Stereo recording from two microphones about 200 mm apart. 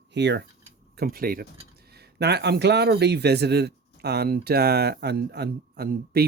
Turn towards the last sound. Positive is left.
turn(degrees=-50)  # may be behind; listen again after turning